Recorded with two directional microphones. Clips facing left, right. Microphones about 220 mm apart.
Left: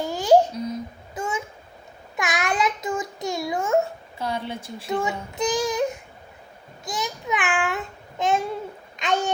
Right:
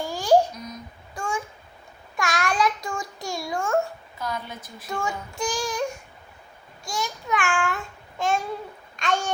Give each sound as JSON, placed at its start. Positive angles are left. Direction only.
{"t": 0.0, "sound": "babbling", "side_deg": 20}
{"t": 2.1, "sound": "a sound", "side_deg": 20}
{"t": 4.2, "sound": "speech", "side_deg": 30}
{"t": 6.8, "sound": "child singing", "side_deg": 20}
{"t": 8.2, "sound": "babbling", "side_deg": 20}